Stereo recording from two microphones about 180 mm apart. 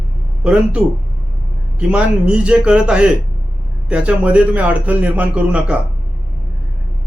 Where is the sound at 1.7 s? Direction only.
5° right (ahead or behind).